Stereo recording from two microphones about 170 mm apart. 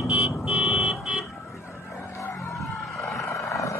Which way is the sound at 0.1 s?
5° right (ahead or behind).